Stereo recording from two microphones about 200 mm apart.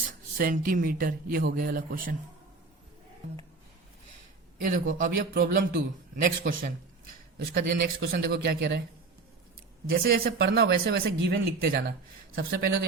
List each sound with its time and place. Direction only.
0.3 s speech: 45° right (ahead or behind)
4.7 s speech: 40° right (ahead or behind)
9.9 s speech: 50° right (ahead or behind)